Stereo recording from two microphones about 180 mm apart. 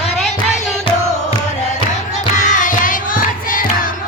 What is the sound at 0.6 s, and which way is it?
Music, 35° left (ahead or behind).